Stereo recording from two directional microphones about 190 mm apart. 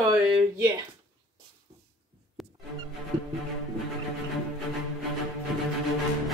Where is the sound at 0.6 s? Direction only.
15° right (ahead or behind).